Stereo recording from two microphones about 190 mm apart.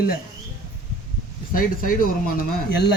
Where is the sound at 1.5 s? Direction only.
45° left (ahead or behind).